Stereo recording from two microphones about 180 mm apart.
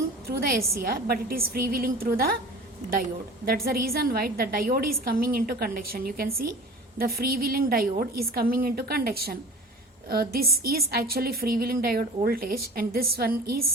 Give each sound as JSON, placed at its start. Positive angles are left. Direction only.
{"t": 0.3, "sound": "a woman's voice", "side_deg": -55}
{"t": 3.4, "sound": "a woman's voice", "side_deg": -55}